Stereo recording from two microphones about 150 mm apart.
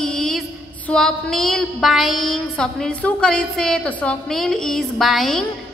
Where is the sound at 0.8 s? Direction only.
5° left (ahead or behind).